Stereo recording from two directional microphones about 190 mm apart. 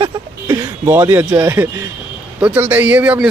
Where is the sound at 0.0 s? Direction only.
20° right (ahead or behind).